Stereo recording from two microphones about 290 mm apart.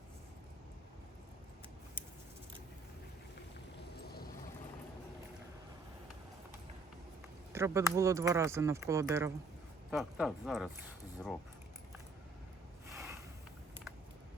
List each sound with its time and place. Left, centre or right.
4.0 s boat: left
7.5 s speech: centre
12.9 s a sound: centre